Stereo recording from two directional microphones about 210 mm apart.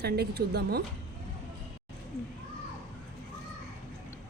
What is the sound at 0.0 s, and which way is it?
Speech, 50° right (ahead or behind).